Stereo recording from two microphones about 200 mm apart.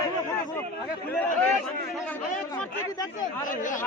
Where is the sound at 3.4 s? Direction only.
40° left (ahead or behind).